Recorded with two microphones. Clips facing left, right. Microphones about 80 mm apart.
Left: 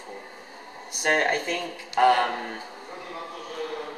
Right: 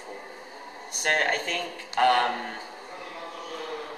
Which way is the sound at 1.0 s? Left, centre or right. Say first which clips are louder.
Left 2 dB; centre.